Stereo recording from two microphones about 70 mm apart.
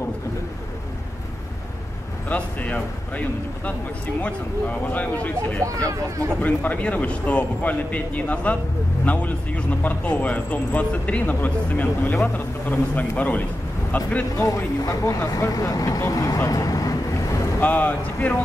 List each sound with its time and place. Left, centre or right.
2.2 s speech: left
14.3 s speech: left
16.4 s vehicle: left
17.6 s speech: left